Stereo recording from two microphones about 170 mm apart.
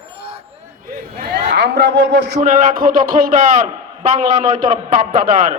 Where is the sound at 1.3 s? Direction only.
80° right.